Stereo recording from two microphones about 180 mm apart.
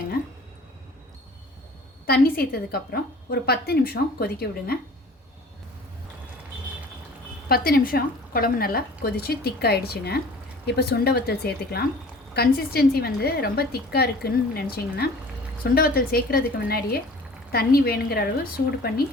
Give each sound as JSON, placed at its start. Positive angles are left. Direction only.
{"t": 2.0, "sound": "a woman's voice", "side_deg": 55}
{"t": 7.4, "sound": "a woman's voice", "side_deg": 55}